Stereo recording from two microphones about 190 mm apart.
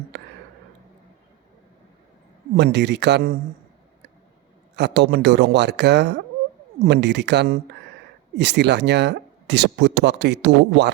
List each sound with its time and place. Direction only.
0.1 s a sound: 65° right (ahead or behind)
2.6 s speech: 65° right (ahead or behind)
4.8 s speech: 60° right (ahead or behind)